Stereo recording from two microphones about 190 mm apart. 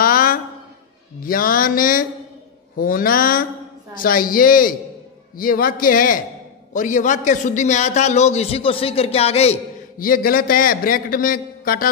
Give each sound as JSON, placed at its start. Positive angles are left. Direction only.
{"t": 0.0, "sound": "a sound", "side_deg": 45}
{"t": 1.2, "sound": "a man's voice", "side_deg": 50}
{"t": 9.9, "sound": "a man's voice", "side_deg": 50}